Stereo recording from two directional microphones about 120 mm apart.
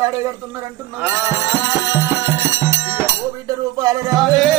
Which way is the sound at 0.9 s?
20° right (ahead or behind).